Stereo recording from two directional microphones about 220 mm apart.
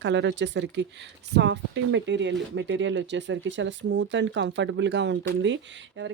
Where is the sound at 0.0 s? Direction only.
55° right (ahead or behind).